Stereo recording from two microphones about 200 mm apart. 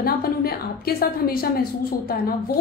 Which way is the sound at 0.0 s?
50° left (ahead or behind).